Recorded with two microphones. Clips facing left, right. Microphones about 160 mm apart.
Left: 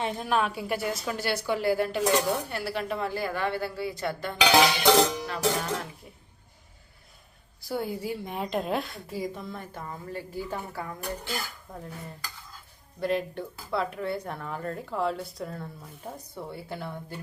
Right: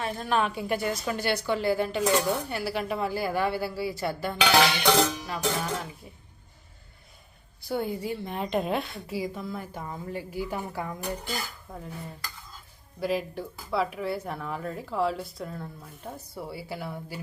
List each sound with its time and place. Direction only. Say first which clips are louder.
0.0 s a woman's voice: left 1 dB; 20° left (ahead or behind)
0.3 s a woman's voice: right 2 dB; 5° left (ahead or behind)
4.6 s chink: left 2 dB; 15° left (ahead or behind)
5.4 s speech: left 2 dB; centre (ahead or behind)
7.6 s speech: right 1 dB; centre (ahead or behind); by 10.9 s 15° right (ahead or behind)
11.3 s speech: even; centre (ahead or behind)
13.0 s speech: left 1 dB; 5° right (ahead or behind)